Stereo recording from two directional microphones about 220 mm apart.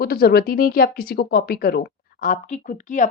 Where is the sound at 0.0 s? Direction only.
45° left (ahead or behind).